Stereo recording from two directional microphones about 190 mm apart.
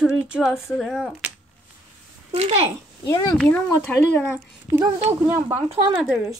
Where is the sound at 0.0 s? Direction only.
5° right (ahead or behind).